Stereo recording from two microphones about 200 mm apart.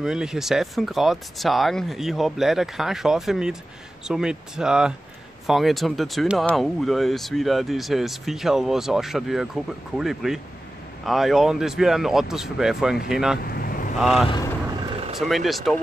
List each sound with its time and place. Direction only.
0.0 s speech: 5° right (ahead or behind)
13.4 s vehicle: 50° left (ahead or behind)
13.9 s speech: centre (ahead or behind)